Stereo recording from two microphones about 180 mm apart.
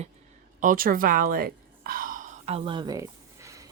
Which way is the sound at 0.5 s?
50° right (ahead or behind).